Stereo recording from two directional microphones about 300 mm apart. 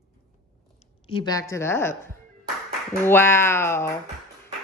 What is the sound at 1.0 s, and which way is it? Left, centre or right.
Speech, centre.